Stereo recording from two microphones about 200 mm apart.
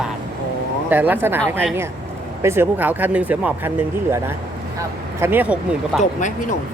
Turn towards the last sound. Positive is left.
turn(degrees=40)  # may be behind; listen again after turning